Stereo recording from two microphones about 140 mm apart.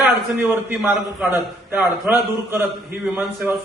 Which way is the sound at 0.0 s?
10° right (ahead or behind).